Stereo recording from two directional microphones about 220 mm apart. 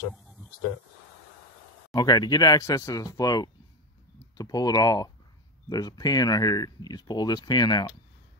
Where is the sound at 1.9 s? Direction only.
20° left (ahead or behind).